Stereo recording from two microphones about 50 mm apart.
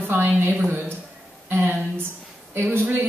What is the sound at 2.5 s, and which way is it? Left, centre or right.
Speech, right.